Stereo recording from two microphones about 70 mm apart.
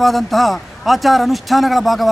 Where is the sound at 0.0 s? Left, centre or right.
Centre.